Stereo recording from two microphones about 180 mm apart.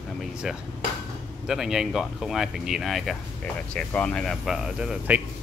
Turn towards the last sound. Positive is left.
turn(degrees=-5)  # may be behind; listen again after turning